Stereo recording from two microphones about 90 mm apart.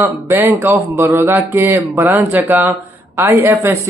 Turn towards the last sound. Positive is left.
turn(degrees=-30)  # may be behind; listen again after turning